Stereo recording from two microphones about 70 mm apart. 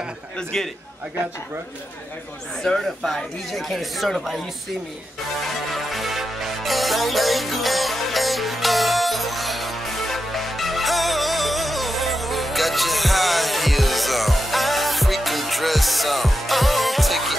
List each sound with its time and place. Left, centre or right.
0.4 s a man's voice: centre
2.6 s speech: centre
5.5 s music: centre